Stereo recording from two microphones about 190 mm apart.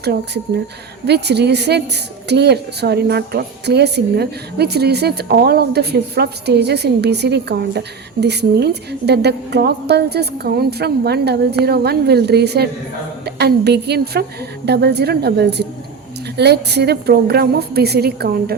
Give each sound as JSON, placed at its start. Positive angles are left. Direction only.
{"t": 1.0, "sound": "a woman's voice", "side_deg": -60}